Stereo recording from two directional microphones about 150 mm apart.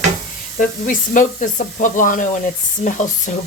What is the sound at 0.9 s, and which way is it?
A woman's voice, 60° left (ahead or behind).